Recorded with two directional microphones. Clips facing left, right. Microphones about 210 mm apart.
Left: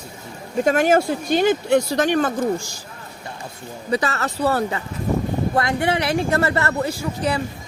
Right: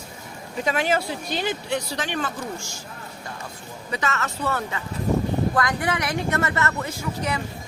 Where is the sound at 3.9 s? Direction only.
35° left (ahead or behind).